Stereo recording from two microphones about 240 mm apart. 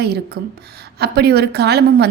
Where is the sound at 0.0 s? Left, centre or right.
Right.